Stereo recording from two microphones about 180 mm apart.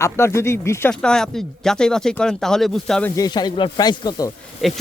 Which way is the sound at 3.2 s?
20° left (ahead or behind).